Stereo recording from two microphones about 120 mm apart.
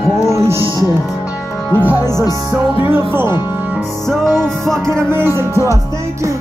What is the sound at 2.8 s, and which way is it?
Speech, 15° right (ahead or behind).